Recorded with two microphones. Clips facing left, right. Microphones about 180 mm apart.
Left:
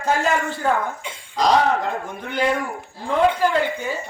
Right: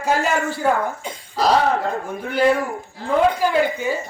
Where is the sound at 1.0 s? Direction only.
40° right (ahead or behind).